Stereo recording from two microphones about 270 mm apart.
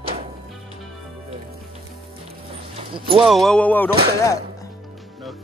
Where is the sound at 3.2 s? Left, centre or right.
Centre.